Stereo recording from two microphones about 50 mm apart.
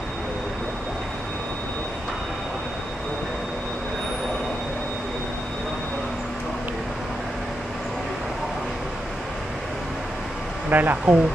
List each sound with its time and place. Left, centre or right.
10.7 s speech: right